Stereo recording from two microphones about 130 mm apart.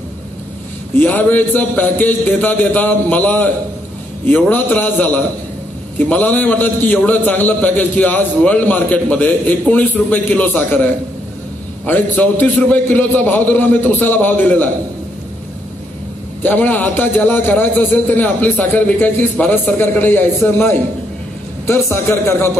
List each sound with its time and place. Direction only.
0.9 s a man's voice: 15° left (ahead or behind)
16.4 s a man's voice: 15° left (ahead or behind)